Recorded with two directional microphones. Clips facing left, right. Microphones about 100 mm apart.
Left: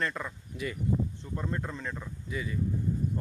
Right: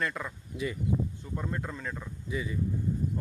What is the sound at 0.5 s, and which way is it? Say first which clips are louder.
Speech: right 2 dB; 25° right (ahead or behind).